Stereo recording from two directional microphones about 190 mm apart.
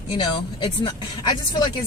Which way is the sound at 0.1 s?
30° left (ahead or behind).